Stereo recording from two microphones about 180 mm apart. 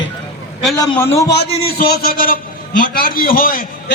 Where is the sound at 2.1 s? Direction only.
50° left (ahead or behind).